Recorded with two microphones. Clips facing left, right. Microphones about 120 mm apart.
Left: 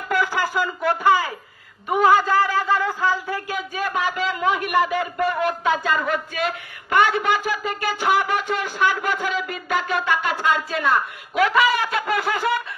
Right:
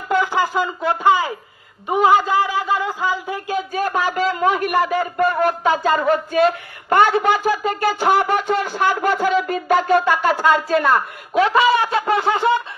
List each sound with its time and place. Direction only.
0.1 s speech: 20° right (ahead or behind)
3.7 s a man's voice: 40° right (ahead or behind)
11.3 s speech: 30° right (ahead or behind)